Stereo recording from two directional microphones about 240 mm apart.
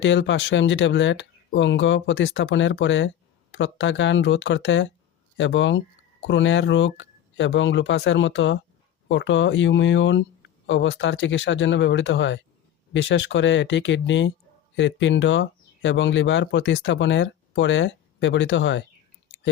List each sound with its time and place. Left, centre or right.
0.0 s speech: left